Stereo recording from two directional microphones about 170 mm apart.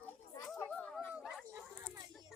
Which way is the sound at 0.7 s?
5° left (ahead or behind).